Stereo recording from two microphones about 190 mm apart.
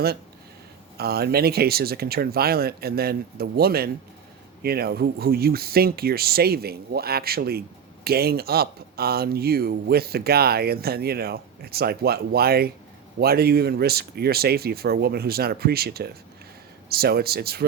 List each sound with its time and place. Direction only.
0.9 s speech: 55° right (ahead or behind)